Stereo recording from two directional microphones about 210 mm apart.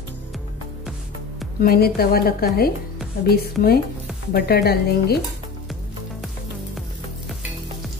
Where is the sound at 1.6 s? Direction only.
45° left (ahead or behind).